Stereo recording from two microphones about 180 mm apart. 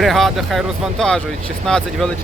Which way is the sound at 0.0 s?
Centre (ahead or behind).